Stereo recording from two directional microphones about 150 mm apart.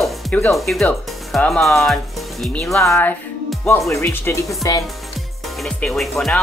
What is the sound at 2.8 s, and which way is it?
Speech, 20° left (ahead or behind).